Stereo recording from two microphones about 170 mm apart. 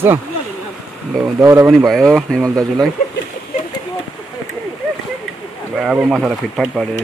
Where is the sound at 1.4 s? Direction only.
15° right (ahead or behind).